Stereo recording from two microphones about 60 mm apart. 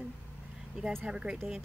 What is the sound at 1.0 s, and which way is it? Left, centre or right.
Speech, centre.